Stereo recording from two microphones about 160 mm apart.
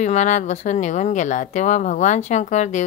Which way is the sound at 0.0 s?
50° left (ahead or behind).